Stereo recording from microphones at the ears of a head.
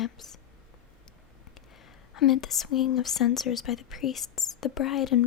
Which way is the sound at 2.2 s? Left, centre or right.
Left.